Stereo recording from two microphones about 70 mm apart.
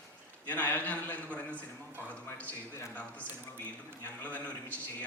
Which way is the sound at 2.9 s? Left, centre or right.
Left.